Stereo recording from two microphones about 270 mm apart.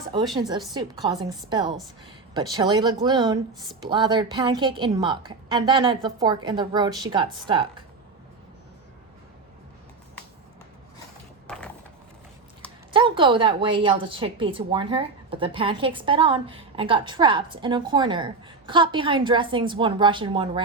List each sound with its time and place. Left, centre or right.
0.3 s a woman's voice: centre
11.4 s mechanisms: centre
12.9 s a woman's voice: centre